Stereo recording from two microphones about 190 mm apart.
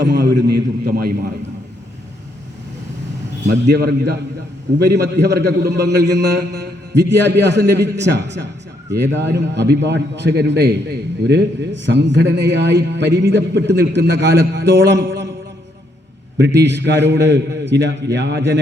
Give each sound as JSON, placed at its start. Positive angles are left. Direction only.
{"t": 0.0, "sound": "a sound", "side_deg": -65}
{"t": 3.7, "sound": "a man's voice", "side_deg": -60}
{"t": 16.4, "sound": "a man's voice", "side_deg": -65}